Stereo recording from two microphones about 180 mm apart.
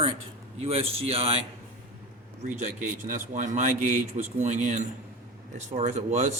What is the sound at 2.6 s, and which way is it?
Speech, 45° right (ahead or behind).